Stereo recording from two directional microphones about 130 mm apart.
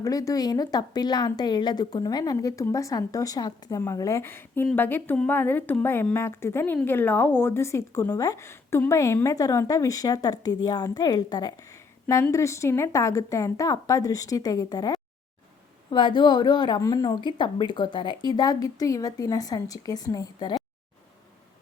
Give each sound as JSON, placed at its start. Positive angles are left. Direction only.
{"t": 0.0, "sound": "a woman's voice", "side_deg": 25}